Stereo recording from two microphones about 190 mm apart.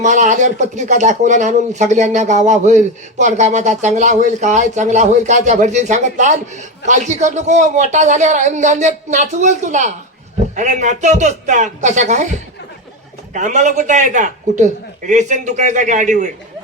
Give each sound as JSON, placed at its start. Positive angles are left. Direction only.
{"t": 0.0, "sound": "speech", "side_deg": -40}
{"t": 13.3, "sound": "speech", "side_deg": -40}